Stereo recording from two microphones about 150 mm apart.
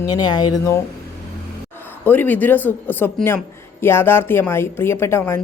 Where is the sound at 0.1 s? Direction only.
25° left (ahead or behind).